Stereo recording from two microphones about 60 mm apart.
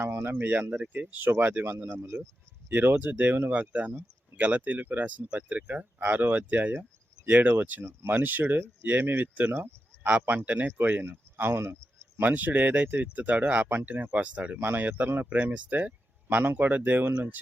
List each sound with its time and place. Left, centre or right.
0.0 s speech: right
12.2 s speech: right